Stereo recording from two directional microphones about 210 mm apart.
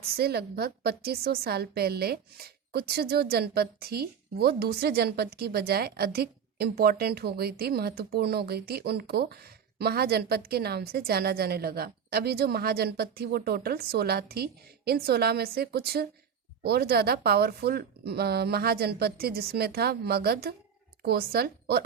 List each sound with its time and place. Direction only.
0.0 s a woman's voice: 50° right (ahead or behind)